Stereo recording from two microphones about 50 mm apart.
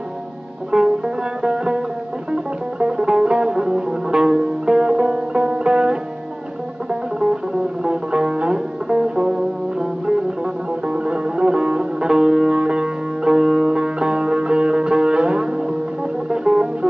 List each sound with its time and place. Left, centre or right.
0.7 s music: centre